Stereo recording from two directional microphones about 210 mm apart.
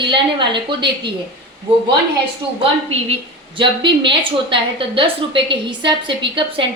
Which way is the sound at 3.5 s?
25° right (ahead or behind).